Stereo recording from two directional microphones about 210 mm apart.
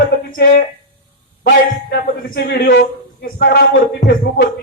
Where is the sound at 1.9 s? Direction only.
50° left (ahead or behind).